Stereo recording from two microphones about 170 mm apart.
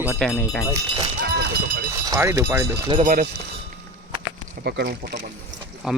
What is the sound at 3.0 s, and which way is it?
Speech, 50° right (ahead or behind).